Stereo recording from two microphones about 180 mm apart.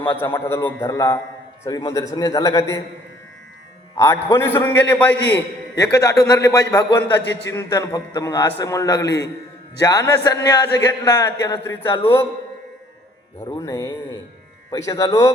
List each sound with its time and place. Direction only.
0.1 s a man's voice: 10° left (ahead or behind)
3.9 s a man's voice: 15° left (ahead or behind)
7.2 s a man's voice: 75° left (ahead or behind)
7.5 s a man's voice: 15° left (ahead or behind)
13.4 s a man's voice: 15° left (ahead or behind)